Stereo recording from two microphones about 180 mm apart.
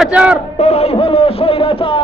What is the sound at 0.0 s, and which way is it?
Speech, 5° right (ahead or behind).